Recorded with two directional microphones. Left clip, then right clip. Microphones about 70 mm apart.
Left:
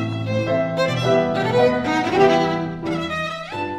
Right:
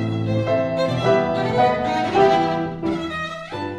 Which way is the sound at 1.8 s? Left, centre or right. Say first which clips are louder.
Even; right.